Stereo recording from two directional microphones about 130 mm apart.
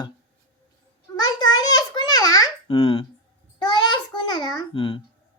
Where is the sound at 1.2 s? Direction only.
30° left (ahead or behind).